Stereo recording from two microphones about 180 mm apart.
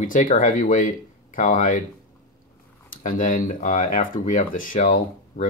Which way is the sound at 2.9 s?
50° left (ahead or behind).